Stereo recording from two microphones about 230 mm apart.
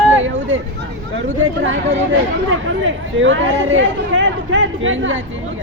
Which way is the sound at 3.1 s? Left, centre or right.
Right.